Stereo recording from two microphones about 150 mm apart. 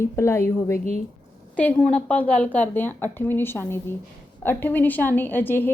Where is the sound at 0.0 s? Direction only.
15° left (ahead or behind).